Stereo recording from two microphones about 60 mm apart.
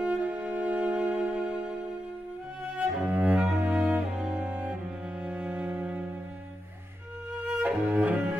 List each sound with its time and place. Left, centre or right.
0.0 s music: centre
2.8 s cello: right
5.2 s music: right
7.4 s cello: right